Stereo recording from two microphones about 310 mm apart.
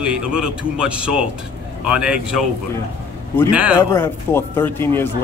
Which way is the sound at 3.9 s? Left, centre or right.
Centre.